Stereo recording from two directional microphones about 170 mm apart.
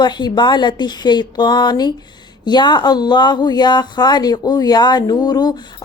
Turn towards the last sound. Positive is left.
turn(degrees=25)  # may be behind; listen again after turning